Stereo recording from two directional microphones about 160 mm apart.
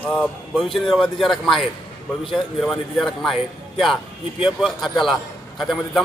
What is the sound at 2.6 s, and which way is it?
Speech, centre (ahead or behind).